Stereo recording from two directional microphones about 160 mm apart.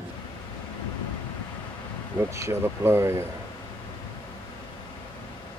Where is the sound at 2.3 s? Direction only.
15° right (ahead or behind).